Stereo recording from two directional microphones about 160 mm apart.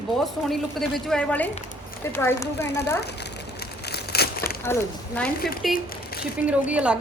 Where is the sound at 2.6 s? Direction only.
90° left.